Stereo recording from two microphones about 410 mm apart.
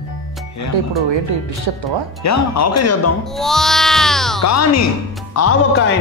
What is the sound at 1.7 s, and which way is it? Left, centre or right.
Speech, right.